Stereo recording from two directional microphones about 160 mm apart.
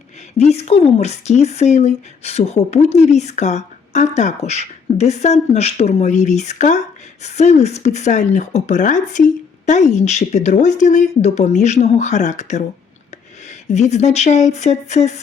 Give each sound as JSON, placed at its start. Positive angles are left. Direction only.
{"t": 0.3, "sound": "speech", "side_deg": 40}